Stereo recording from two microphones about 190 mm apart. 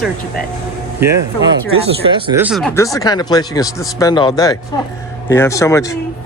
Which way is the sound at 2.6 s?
10° left (ahead or behind).